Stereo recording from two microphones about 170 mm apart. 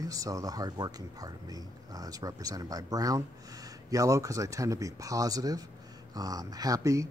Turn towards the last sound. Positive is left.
turn(degrees=-20)  # may be behind; listen again after turning